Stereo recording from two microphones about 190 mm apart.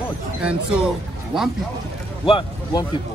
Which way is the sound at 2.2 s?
25° left (ahead or behind).